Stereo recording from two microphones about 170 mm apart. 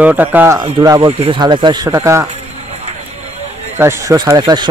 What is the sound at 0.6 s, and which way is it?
Speech, 25° right (ahead or behind).